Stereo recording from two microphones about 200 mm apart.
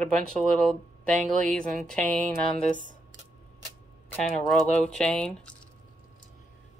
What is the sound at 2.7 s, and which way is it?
Speech, 40° left (ahead or behind).